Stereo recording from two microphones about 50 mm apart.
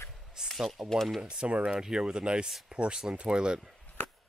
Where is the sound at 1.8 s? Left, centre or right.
Centre.